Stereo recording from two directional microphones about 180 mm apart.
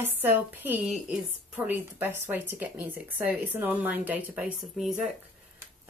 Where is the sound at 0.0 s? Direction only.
10° right (ahead or behind).